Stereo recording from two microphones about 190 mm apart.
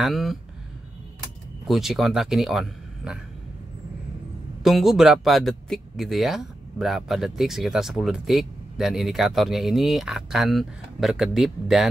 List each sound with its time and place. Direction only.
0.0 s speech: centre (ahead or behind)
1.7 s speech: centre (ahead or behind)
4.6 s speech: centre (ahead or behind)